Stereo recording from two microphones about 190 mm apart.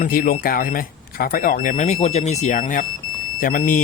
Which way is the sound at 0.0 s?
50° left (ahead or behind).